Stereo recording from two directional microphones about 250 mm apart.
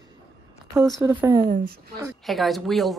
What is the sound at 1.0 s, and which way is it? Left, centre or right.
Speech, centre.